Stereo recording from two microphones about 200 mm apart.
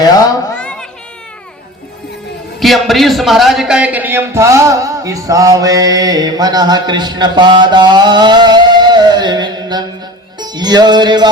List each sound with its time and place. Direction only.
0.0 s speech: 20° left (ahead or behind)
0.5 s a sound: 5° left (ahead or behind)
2.6 s a man's voice: centre (ahead or behind); by 11.3 s 20° right (ahead or behind)